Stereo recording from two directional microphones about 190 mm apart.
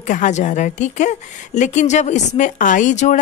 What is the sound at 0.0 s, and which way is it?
Speech, 40° left (ahead or behind).